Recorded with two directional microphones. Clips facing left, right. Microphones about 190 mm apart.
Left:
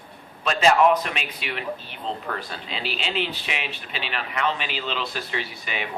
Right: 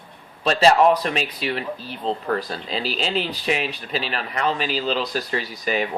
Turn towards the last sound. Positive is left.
turn(degrees=-40)  # may be behind; listen again after turning